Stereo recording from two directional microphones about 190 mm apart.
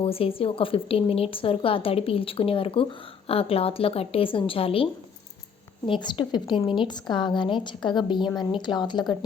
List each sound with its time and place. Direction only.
0.0 s a woman's voice: 30° left (ahead or behind)